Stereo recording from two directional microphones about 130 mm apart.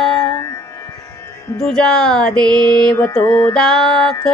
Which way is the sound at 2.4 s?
10° left (ahead or behind).